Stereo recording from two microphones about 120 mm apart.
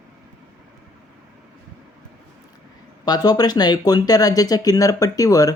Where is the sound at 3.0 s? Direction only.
35° left (ahead or behind).